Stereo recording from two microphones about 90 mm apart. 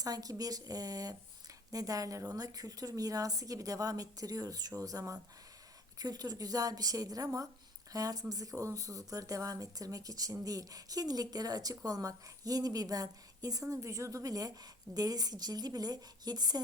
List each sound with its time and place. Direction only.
0.0 s a woman's voice: 40° right (ahead or behind)